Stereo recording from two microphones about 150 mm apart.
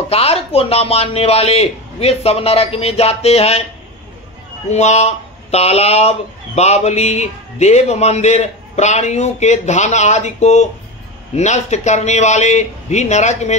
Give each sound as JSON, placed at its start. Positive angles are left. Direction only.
{"t": 0.1, "sound": "speech", "side_deg": 40}
{"t": 4.6, "sound": "speech", "side_deg": 50}